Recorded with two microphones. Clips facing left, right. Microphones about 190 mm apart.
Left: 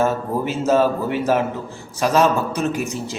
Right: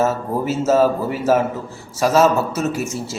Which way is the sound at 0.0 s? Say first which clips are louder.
Right 1 dB; 5° right (ahead or behind).